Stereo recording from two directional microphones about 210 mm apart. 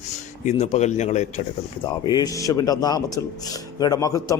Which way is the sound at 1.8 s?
20° left (ahead or behind).